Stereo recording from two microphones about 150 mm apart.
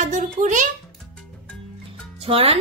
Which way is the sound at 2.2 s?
40° right (ahead or behind).